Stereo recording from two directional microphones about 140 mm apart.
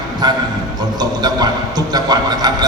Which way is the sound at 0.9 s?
30° right (ahead or behind).